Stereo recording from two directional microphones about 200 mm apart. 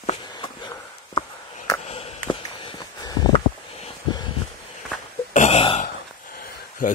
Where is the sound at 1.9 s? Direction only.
30° left (ahead or behind).